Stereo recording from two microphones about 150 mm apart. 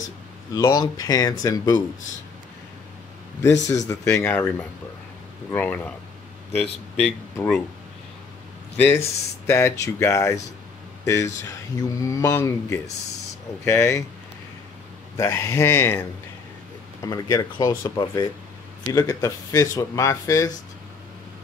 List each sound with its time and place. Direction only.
0.5 s speech: 25° left (ahead or behind)
3.6 s speech: 20° left (ahead or behind)
8.7 s speech: 15° left (ahead or behind)
11.4 s speech: 20° left (ahead or behind)
15.1 s speech: 20° left (ahead or behind)
17.0 s speech: 25° left (ahead or behind)